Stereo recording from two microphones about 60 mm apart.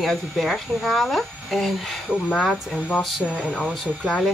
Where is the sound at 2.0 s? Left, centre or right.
Centre.